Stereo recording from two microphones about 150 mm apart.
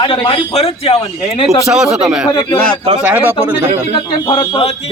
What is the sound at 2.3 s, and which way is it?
Speech, 30° left (ahead or behind).